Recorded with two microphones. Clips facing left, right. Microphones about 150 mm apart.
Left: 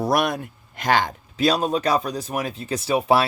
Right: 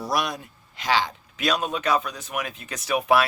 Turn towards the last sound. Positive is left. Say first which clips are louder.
# left 2 dB
turn(degrees=30)  # may be behind; listen again after turning